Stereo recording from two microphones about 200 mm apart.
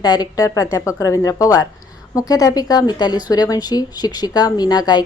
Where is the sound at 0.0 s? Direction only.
20° left (ahead or behind).